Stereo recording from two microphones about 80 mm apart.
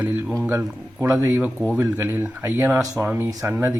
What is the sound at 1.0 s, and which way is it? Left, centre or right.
Speech, right.